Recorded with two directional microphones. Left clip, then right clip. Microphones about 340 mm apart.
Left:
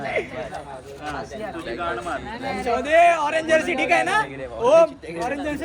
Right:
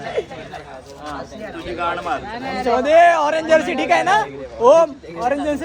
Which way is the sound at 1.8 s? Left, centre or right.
Centre.